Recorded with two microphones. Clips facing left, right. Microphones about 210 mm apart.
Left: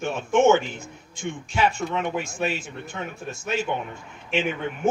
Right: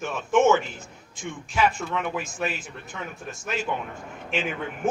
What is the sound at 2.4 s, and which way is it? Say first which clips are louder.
A man's voice: left 3 dB; 25° left (ahead or behind).